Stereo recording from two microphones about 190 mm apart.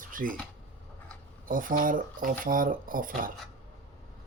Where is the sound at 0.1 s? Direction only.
45° right (ahead or behind).